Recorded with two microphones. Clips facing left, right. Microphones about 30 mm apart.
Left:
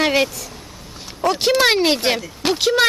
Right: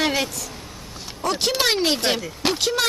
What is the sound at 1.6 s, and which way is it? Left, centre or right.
Speech, centre.